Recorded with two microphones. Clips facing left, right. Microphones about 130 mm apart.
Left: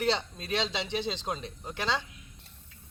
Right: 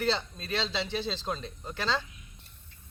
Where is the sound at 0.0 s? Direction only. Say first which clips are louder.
Left 1 dB; 15° left (ahead or behind).